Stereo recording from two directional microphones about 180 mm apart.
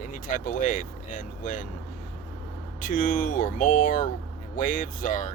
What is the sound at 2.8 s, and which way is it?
Speech, 50° left (ahead or behind).